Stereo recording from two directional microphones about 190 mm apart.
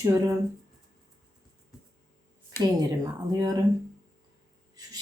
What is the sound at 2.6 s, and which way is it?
Speech, 20° right (ahead or behind).